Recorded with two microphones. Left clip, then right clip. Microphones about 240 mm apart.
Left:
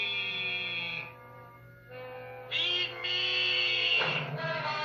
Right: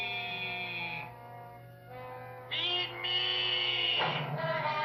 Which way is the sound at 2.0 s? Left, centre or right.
Right.